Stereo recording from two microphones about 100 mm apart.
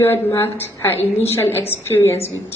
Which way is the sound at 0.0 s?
25° left (ahead or behind).